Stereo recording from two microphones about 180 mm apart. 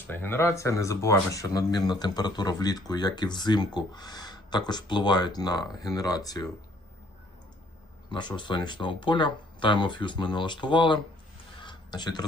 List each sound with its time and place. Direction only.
0.1 s speech: 10° left (ahead or behind)
8.1 s speech: 25° left (ahead or behind)
11.6 s a sound: 25° left (ahead or behind)